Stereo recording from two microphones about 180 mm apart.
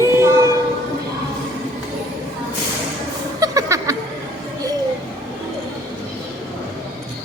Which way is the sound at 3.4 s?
20° right (ahead or behind).